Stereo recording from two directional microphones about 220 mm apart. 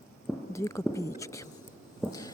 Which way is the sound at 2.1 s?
15° left (ahead or behind).